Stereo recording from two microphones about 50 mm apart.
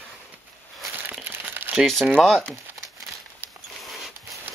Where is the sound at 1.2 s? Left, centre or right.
Right.